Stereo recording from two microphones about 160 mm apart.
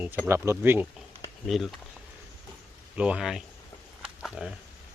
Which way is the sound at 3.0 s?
5° right (ahead or behind).